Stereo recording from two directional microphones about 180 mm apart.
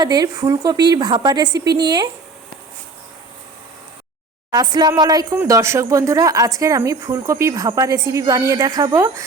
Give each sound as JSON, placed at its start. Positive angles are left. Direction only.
{"t": 0.0, "sound": "a woman's voice", "side_deg": -20}
{"t": 4.5, "sound": "a woman's voice", "side_deg": -20}